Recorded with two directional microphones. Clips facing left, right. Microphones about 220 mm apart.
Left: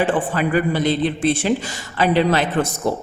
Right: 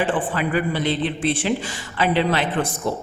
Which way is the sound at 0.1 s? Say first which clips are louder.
Left 3 dB; 45° left (ahead or behind).